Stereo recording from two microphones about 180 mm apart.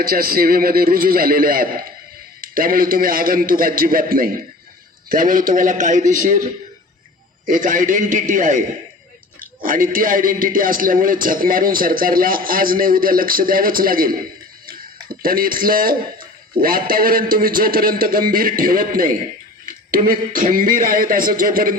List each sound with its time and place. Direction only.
0.0 s a man's voice: 55° right (ahead or behind)
7.4 s a man's voice: 50° right (ahead or behind)